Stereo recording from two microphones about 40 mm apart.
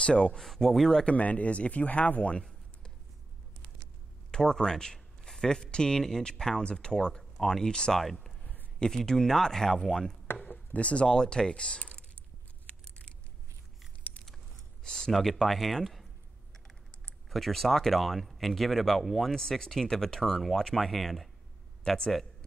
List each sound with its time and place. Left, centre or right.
0.0 s speech: left
0.4 s speech: centre
1.0 s speech: left
4.3 s speech: centre
8.0 s speech: centre
8.7 s speech: centre
10.3 s a sound: left
11.1 s speech: centre
14.0 s a sound: left
14.8 s speech: centre
17.3 s speech: centre
21.8 s speech: left